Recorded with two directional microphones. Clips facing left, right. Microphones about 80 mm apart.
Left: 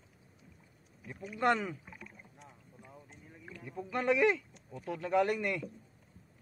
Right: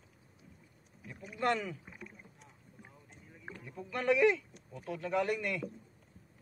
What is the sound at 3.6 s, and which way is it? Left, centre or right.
Speech, left.